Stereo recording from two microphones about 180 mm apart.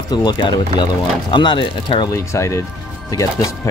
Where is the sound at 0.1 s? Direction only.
25° left (ahead or behind).